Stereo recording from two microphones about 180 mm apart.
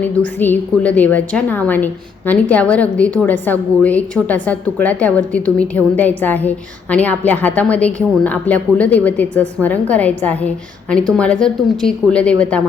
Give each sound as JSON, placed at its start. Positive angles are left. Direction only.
{"t": 0.0, "sound": "a woman's voice", "side_deg": 10}